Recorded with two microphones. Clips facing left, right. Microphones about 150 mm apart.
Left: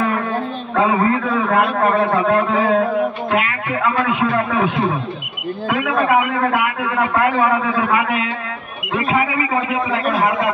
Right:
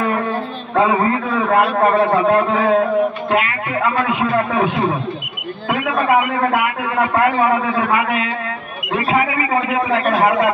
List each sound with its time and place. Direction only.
0.7 s a man's voice: 25° right (ahead or behind)
6.2 s speech: 35° right (ahead or behind)